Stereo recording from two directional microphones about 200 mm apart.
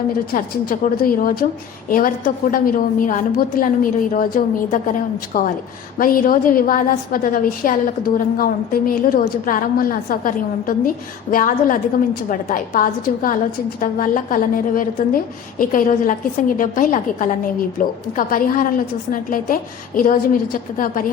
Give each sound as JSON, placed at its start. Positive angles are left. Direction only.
{"t": 0.3, "sound": "a woman's voice", "side_deg": 45}